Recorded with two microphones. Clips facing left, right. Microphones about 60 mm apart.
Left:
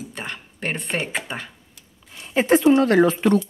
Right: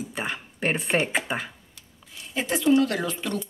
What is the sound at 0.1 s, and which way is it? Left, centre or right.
Speech, centre.